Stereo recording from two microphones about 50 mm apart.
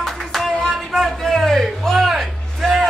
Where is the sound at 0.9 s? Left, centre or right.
Centre.